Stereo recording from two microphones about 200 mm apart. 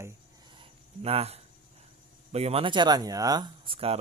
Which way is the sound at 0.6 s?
30° right (ahead or behind).